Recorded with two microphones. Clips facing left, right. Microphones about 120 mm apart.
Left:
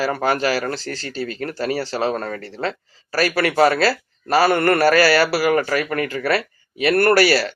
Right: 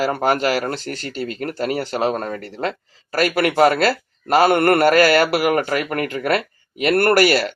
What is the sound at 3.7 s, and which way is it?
Speech, 50° right (ahead or behind).